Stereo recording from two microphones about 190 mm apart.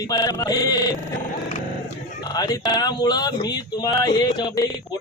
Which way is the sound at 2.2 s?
20° left (ahead or behind).